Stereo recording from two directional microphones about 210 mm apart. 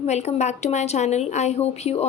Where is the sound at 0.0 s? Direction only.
30° left (ahead or behind).